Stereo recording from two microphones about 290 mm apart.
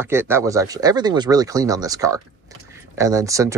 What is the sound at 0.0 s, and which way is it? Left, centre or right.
Speech, centre.